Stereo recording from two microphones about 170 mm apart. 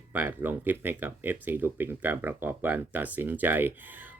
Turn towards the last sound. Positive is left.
turn(degrees=-10)  # may be behind; listen again after turning